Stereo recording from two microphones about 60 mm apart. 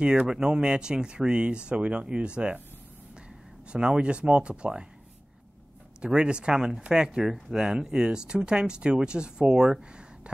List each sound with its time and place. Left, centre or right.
0.0 s speech: centre
3.7 s speech: centre
5.9 s speech: centre